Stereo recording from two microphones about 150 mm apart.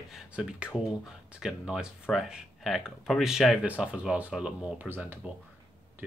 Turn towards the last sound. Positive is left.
turn(degrees=-10)  # may be behind; listen again after turning